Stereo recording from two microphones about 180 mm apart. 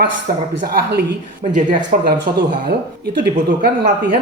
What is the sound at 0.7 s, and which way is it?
Speech, 60° right (ahead or behind).